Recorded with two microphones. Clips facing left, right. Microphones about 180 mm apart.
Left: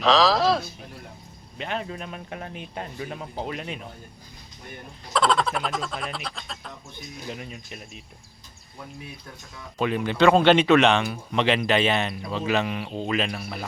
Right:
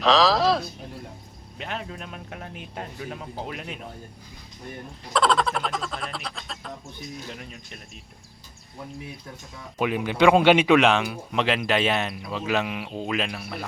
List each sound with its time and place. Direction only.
0.0 s a sound: centre (ahead or behind)
1.5 s speech: centre (ahead or behind)
5.1 s speech: centre (ahead or behind)
9.7 s speech: 10° right (ahead or behind)